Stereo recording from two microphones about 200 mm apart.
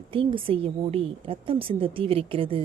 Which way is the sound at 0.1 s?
25° right (ahead or behind).